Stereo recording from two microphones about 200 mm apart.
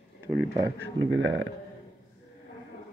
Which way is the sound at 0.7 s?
65° right (ahead or behind).